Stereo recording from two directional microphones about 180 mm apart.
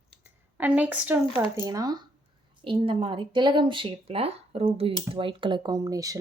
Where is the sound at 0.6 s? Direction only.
10° right (ahead or behind).